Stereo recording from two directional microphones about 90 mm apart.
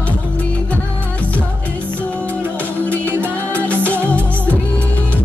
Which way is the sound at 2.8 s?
15° left (ahead or behind).